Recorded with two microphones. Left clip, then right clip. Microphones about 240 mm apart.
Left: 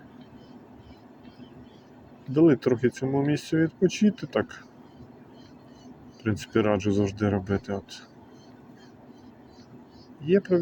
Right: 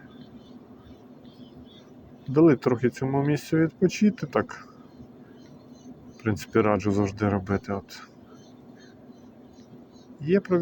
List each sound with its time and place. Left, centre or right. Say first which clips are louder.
2.3 s speech: right 1 dB; centre
6.2 s speech: right 2 dB; centre
10.2 s speech: left 1 dB; centre